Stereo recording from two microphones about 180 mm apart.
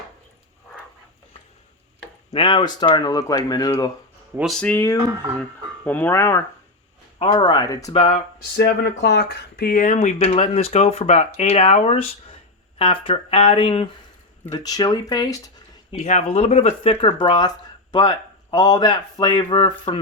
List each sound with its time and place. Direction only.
2.3 s speech: 25° left (ahead or behind)
4.4 s speech: centre (ahead or behind)
7.2 s speech: 25° left (ahead or behind)
7.9 s speech: 35° left (ahead or behind)
8.5 s speech: 70° left (ahead or behind); by 13.8 s 30° left (ahead or behind)
14.5 s speech: 20° left (ahead or behind)
15.9 s speech: 40° left (ahead or behind)